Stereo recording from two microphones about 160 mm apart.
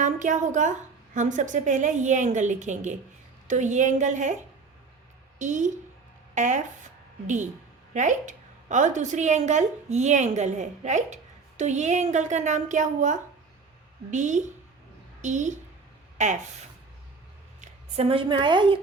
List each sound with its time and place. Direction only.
0.0 s a woman's voice: 50° right (ahead or behind)
5.4 s a woman's voice: 50° right (ahead or behind)
7.9 s a woman's voice: 50° right (ahead or behind)
17.6 s a woman's voice: 40° right (ahead or behind)